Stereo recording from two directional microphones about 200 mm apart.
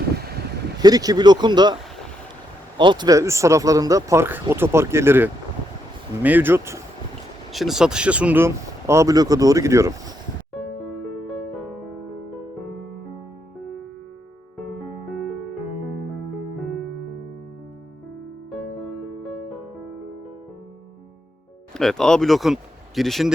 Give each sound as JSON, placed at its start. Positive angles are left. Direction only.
{"t": 0.8, "sound": "speech", "side_deg": -20}
{"t": 2.7, "sound": "speech", "side_deg": -25}
{"t": 7.5, "sound": "speech", "side_deg": 0}
{"t": 18.5, "sound": "music", "side_deg": 0}
{"t": 21.8, "sound": "speech", "side_deg": 0}